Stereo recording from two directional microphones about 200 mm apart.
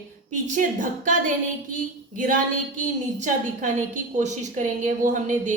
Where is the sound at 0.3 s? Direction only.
40° right (ahead or behind).